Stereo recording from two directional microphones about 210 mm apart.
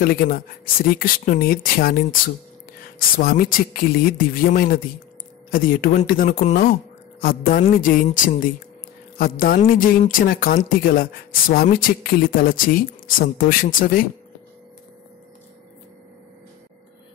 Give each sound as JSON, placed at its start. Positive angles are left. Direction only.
{"t": 0.0, "sound": "speech", "side_deg": 45}